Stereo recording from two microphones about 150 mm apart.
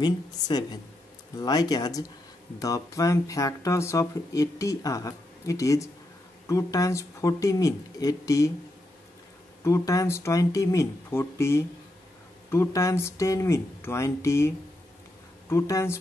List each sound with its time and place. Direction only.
0.0 s speech: 30° left (ahead or behind)
9.6 s speech: 20° left (ahead or behind)